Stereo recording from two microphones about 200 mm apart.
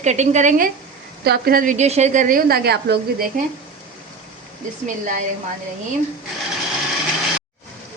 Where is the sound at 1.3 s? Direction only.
50° right (ahead or behind).